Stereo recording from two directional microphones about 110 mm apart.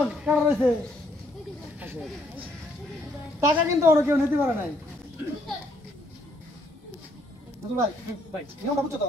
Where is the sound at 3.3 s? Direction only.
25° right (ahead or behind).